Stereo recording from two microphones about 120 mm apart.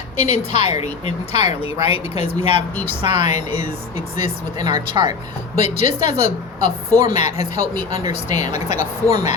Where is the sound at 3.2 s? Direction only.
70° left (ahead or behind).